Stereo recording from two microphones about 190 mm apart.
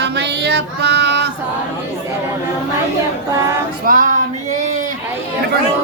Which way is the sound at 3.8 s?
45° right (ahead or behind).